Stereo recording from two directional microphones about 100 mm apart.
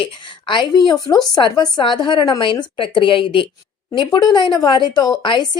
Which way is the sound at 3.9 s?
45° left (ahead or behind).